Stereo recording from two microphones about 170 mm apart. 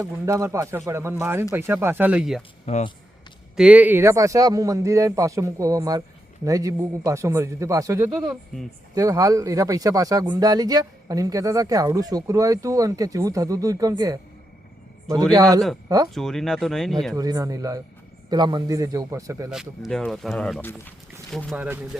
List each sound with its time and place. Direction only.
0.0 s speech: 20° right (ahead or behind)
2.6 s speech: 40° left (ahead or behind)
3.5 s speech: 5° right (ahead or behind); by 14.2 s 20° right (ahead or behind)
15.0 s a man's voice: 5° left (ahead or behind)
15.3 s speech: 20° right (ahead or behind)
16.1 s speech: centre (ahead or behind)
17.2 s speech: 20° right (ahead or behind)
19.5 s speech: centre (ahead or behind)
21.5 s speech: 10° right (ahead or behind)